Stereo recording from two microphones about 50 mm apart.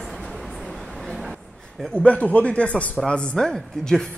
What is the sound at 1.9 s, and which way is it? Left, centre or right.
A man's voice, left.